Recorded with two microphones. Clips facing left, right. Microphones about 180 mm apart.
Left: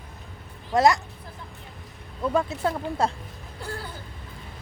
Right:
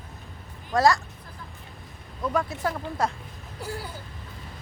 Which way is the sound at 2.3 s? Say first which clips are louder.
Left 3 dB; 25° left (ahead or behind).